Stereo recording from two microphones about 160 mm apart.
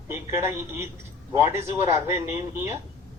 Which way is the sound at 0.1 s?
15° right (ahead or behind).